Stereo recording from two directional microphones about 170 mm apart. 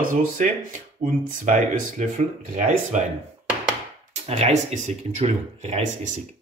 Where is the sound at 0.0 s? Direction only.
50° right (ahead or behind).